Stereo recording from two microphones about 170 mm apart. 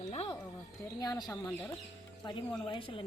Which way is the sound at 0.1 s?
35° left (ahead or behind).